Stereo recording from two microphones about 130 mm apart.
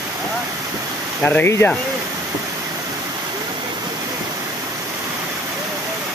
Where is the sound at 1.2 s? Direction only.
15° left (ahead or behind).